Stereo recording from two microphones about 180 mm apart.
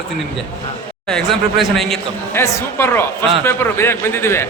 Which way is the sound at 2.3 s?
15° left (ahead or behind).